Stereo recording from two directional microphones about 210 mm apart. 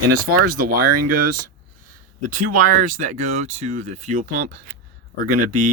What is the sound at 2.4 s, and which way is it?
Speech, 40° right (ahead or behind).